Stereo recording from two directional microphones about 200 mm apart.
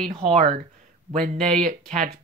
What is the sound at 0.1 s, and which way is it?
Speech, 35° right (ahead or behind).